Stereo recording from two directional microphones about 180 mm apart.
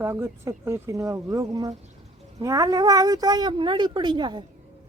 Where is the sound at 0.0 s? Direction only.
15° right (ahead or behind).